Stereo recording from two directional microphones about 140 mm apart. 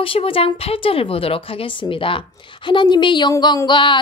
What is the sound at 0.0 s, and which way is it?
A woman's voice, 40° left (ahead or behind).